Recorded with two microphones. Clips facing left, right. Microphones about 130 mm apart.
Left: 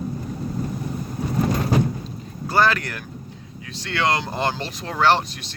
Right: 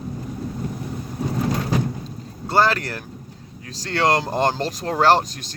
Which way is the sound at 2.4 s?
30° right (ahead or behind).